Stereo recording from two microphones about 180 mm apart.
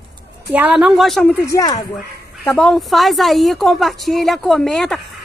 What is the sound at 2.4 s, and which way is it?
A woman's voice, 5° left (ahead or behind).